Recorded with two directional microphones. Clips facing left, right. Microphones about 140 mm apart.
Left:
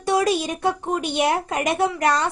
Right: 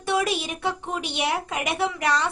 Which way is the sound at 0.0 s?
40° left (ahead or behind).